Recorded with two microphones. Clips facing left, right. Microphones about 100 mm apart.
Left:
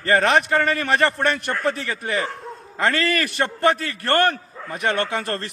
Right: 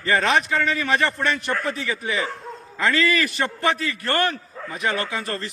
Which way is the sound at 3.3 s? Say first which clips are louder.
Left 3 dB; 50° left (ahead or behind).